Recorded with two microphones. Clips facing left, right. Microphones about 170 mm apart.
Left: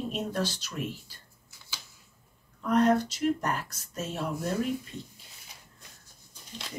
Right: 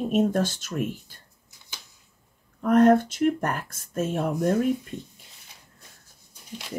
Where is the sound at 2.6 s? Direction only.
50° right (ahead or behind).